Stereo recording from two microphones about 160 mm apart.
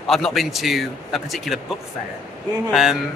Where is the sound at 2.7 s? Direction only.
Centre (ahead or behind).